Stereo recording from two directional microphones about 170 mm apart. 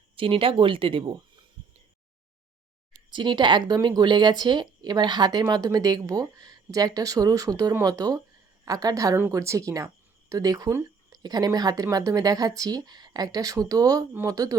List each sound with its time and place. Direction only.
0.2 s speech: 30° right (ahead or behind)
3.1 s a woman's voice: 25° right (ahead or behind)